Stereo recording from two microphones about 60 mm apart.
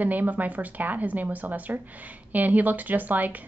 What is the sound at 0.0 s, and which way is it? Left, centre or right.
A woman's voice, right.